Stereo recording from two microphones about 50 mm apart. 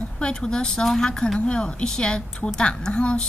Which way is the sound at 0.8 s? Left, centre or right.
Centre.